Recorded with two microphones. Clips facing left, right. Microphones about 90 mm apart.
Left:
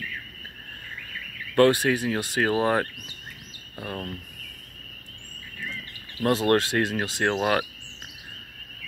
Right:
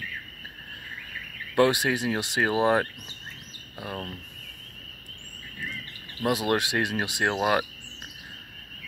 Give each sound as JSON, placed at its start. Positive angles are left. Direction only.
{"t": 1.5, "sound": "speech", "side_deg": -15}
{"t": 6.2, "sound": "speech", "side_deg": -10}